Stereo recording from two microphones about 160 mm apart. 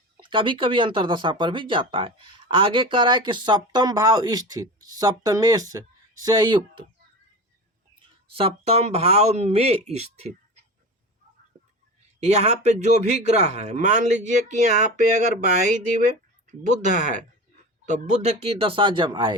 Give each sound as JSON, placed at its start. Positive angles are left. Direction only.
{"t": 0.2, "sound": "speech", "side_deg": -30}
{"t": 8.3, "sound": "speech", "side_deg": -35}
{"t": 12.2, "sound": "a man's voice", "side_deg": -45}
{"t": 16.5, "sound": "a man's voice", "side_deg": -50}